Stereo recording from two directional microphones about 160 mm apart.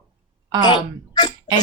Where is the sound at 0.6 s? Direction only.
25° left (ahead or behind).